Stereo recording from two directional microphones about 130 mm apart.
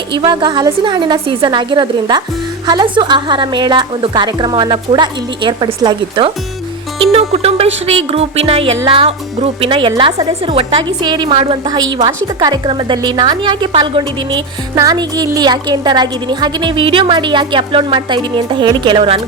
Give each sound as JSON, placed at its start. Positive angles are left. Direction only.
{"t": 0.3, "sound": "a woman's voice", "side_deg": -35}
{"t": 7.0, "sound": "music", "side_deg": -50}
{"t": 10.0, "sound": "a woman's voice", "side_deg": -35}